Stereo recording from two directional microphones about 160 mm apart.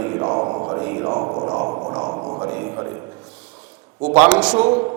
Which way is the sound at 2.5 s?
20° right (ahead or behind).